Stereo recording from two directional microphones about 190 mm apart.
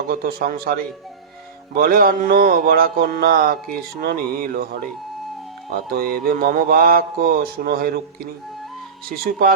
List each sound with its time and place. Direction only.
0.1 s mantra: 50° right (ahead or behind)
5.7 s mantra: 50° right (ahead or behind)
9.0 s mantra: 50° right (ahead or behind)